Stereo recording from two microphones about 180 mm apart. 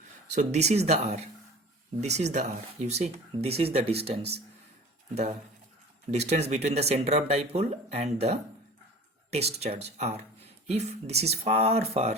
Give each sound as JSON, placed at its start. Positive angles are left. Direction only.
{"t": 0.3, "sound": "speech", "side_deg": -40}
{"t": 5.1, "sound": "speech", "side_deg": -40}